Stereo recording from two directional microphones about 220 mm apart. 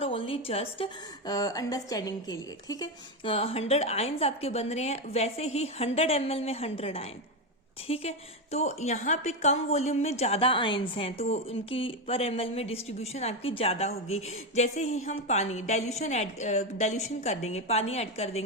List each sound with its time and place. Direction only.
0.0 s a woman's voice: 25° left (ahead or behind)